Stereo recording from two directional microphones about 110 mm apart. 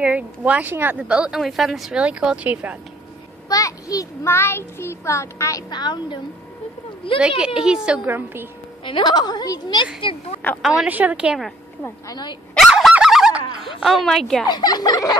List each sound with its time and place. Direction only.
0.0 s a woman's voice: 10° right (ahead or behind)
3.4 s a child's voice: 30° left (ahead or behind)
5.7 s a woman's voice: 40° left (ahead or behind)
7.2 s a woman's voice: 10° right (ahead or behind)
8.1 s a woman's voice: 20° right (ahead or behind)
8.8 s a woman's voice: 45° left (ahead or behind)
10.4 s a woman's voice: 15° left (ahead or behind)
10.8 s a woman's voice: 15° right (ahead or behind)
12.1 s a woman's voice: 40° left (ahead or behind)
12.5 s fowl: centre (ahead or behind)
14.5 s a woman's voice: 40° left (ahead or behind)